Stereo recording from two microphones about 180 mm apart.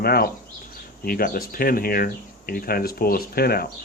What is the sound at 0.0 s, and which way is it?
Speech, 55° left (ahead or behind).